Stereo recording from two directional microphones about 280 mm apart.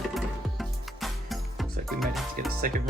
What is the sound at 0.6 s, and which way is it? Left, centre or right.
Music, centre.